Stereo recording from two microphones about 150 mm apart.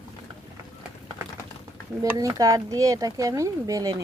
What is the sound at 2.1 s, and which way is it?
Speech, 25° right (ahead or behind).